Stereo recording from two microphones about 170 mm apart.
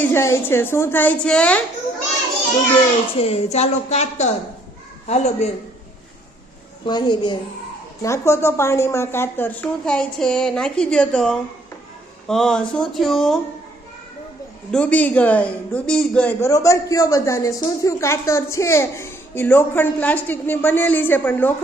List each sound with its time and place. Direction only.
0.0 s a woman's voice: 15° left (ahead or behind)
3.2 s a woman's voice: 35° left (ahead or behind)
6.8 s a woman's voice: 25° left (ahead or behind); by 13.4 s centre (ahead or behind)
14.7 s a woman's voice: 5° left (ahead or behind)
16.5 s a woman's voice: 20° left (ahead or behind)